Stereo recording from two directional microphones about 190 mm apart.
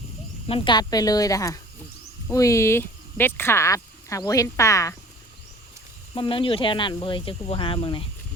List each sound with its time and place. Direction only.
0.4 s speech: 30° left (ahead or behind)
6.1 s speech: 25° left (ahead or behind)